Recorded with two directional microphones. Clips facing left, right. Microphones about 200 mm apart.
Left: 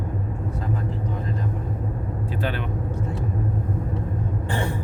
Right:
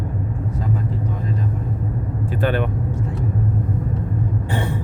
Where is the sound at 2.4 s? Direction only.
55° right (ahead or behind).